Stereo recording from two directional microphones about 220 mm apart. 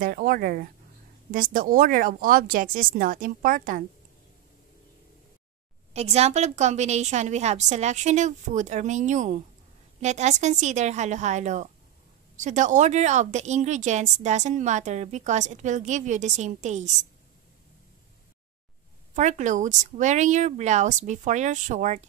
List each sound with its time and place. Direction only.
0.0 s speech: 40° right (ahead or behind)
5.9 s speech: 30° right (ahead or behind)
19.1 s speech: 35° right (ahead or behind)